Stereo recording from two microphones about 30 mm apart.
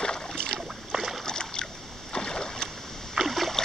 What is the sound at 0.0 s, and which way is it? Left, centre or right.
Boat, left.